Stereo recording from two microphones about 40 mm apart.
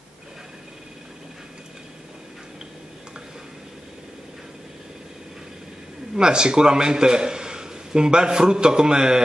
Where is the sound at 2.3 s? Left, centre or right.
Centre.